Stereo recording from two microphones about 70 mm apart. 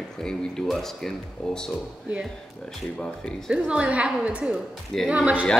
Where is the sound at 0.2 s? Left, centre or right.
Centre.